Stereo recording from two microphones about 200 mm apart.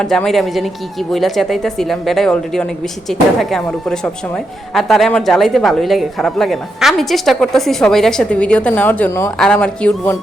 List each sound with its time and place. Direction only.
0.0 s speech: 5° left (ahead or behind)